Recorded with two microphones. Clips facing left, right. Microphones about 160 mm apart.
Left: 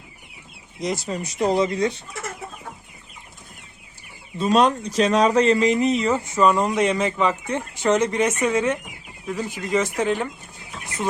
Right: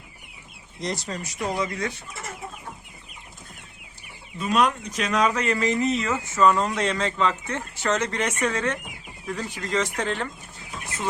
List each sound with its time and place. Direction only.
0.8 s speech: centre (ahead or behind)
1.2 s speech: 25° left (ahead or behind)
4.4 s speech: 30° left (ahead or behind); by 10.2 s 10° left (ahead or behind)